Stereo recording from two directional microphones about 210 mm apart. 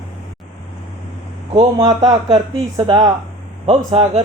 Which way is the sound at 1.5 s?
20° right (ahead or behind).